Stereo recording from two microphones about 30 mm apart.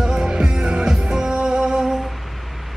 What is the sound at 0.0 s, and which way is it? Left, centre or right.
Music, centre.